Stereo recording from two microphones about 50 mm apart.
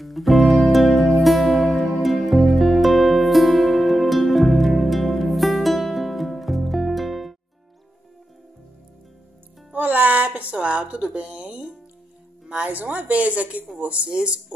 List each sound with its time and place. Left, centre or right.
0.0 s music: centre
9.7 s music: right
12.6 s a woman's voice: right